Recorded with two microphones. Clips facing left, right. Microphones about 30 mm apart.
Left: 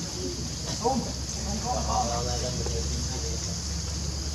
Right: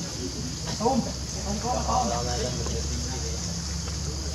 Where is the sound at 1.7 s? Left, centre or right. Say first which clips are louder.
Right 2 dB; centre.